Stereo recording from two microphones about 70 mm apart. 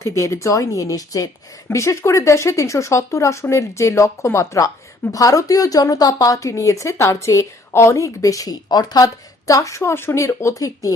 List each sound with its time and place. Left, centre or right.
0.0 s a woman's voice: left
6.5 s a woman's voice: left
9.5 s a woman's voice: left